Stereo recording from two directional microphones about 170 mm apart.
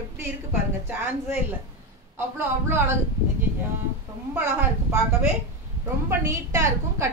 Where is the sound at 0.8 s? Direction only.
10° right (ahead or behind).